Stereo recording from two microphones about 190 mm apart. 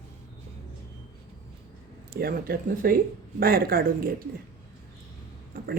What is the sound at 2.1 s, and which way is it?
Speech, 55° right (ahead or behind).